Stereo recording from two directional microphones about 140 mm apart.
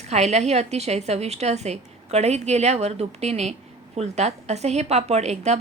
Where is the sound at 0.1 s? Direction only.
50° right (ahead or behind).